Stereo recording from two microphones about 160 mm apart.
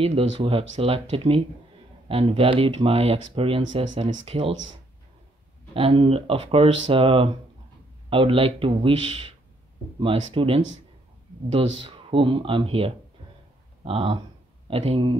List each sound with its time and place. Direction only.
0.0 s speech: 40° right (ahead or behind)
5.8 s speech: 35° right (ahead or behind)